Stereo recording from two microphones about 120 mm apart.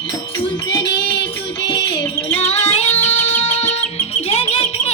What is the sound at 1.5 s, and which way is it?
Music, 35° left (ahead or behind).